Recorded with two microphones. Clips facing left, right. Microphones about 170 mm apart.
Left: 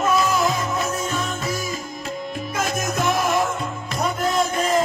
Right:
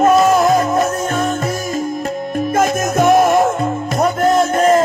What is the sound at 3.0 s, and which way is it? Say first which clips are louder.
Music: right 12 dB; 90° right.